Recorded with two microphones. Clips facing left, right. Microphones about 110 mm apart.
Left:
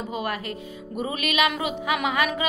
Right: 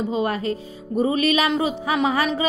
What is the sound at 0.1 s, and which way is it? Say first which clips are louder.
A woman's voice: right 6 dB; 30° right (ahead or behind).